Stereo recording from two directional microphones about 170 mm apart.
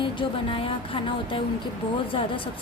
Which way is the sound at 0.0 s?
30° left (ahead or behind).